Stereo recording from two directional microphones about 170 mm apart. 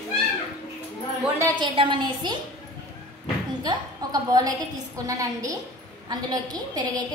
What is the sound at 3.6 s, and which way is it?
A woman's voice, 20° right (ahead or behind).